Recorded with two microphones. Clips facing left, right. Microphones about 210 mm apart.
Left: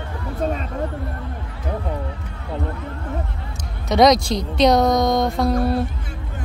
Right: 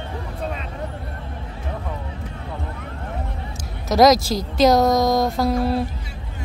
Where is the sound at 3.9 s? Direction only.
Centre (ahead or behind).